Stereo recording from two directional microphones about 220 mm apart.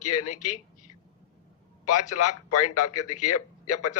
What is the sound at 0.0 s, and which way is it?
Speech, 90° left.